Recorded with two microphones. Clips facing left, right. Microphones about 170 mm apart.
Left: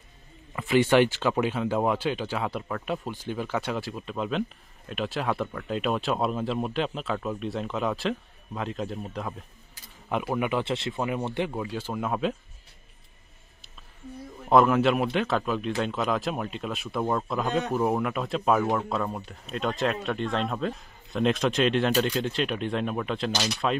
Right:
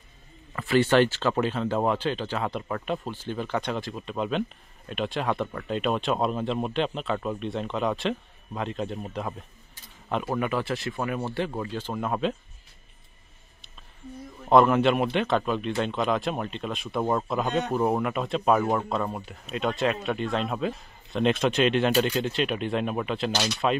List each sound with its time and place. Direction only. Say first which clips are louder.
0.6 s speech: even; 15° left (ahead or behind); by 9.3 s centre (ahead or behind)
10.0 s speech: even; 10° left (ahead or behind)
14.5 s speech: right 1 dB; centre (ahead or behind)